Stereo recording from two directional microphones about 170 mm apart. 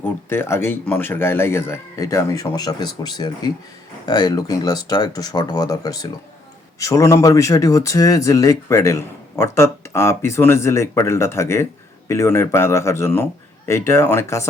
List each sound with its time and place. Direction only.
0.0 s speech: 15° left (ahead or behind)